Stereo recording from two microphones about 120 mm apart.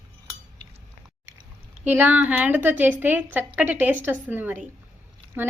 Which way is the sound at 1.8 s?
15° right (ahead or behind).